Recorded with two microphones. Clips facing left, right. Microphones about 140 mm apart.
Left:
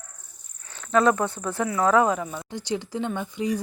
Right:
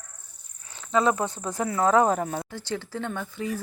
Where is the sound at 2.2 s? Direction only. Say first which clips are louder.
Right 3 dB; 50° right (ahead or behind).